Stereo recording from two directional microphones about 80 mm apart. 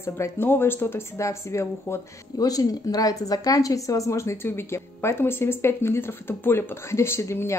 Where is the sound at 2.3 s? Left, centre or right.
Left.